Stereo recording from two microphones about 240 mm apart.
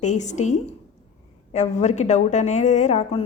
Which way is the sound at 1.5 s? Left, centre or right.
Left.